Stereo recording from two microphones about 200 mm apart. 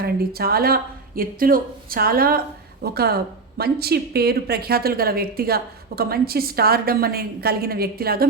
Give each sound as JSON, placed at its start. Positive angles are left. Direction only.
{"t": 0.0, "sound": "a woman's voice", "side_deg": -50}